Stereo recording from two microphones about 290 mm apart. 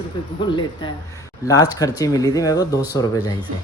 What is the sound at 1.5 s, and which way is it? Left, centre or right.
Speech, centre.